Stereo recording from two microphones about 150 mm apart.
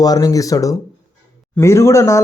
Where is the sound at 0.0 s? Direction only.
25° left (ahead or behind).